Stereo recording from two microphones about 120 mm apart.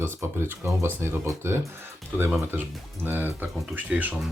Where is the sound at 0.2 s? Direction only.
20° right (ahead or behind).